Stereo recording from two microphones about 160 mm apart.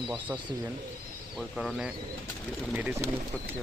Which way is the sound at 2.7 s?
15° right (ahead or behind).